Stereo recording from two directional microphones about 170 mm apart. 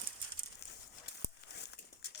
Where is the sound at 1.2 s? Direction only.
80° left.